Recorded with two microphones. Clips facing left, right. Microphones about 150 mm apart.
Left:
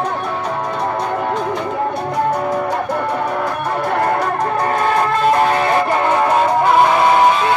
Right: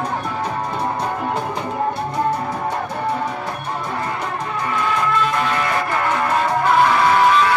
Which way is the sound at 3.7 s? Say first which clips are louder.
Left 8 dB; 65° left (ahead or behind).